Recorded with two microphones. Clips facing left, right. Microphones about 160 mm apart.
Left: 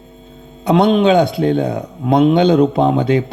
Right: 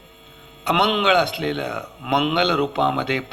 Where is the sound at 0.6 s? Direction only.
35° left (ahead or behind).